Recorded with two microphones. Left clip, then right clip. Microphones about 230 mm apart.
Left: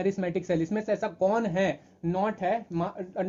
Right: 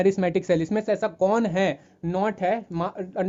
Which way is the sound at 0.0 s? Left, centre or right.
Right.